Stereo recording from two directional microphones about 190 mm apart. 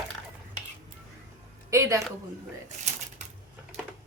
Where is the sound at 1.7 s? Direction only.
15° right (ahead or behind).